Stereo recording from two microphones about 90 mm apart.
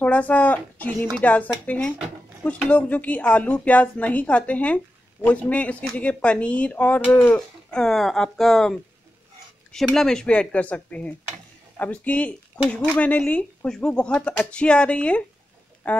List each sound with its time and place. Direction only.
0.0 s a woman's voice: 15° left (ahead or behind)
7.3 s a woman's voice: 5° left (ahead or behind)